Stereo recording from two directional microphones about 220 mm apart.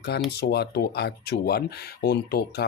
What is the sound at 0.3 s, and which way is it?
Speech, 45° left (ahead or behind).